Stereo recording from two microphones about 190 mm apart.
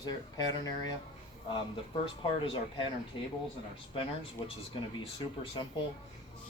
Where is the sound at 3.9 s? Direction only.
30° left (ahead or behind).